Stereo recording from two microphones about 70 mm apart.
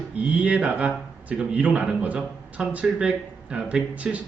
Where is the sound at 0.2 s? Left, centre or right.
Centre.